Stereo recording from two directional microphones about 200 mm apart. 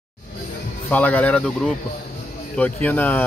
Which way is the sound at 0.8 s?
10° left (ahead or behind).